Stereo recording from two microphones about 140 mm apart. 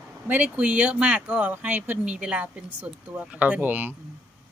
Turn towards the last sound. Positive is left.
turn(degrees=-10)  # may be behind; listen again after turning